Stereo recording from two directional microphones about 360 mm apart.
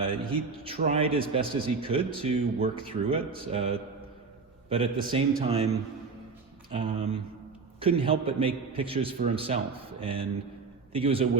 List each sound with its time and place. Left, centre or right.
0.0 s a man's voice: centre
6.7 s a man's voice: centre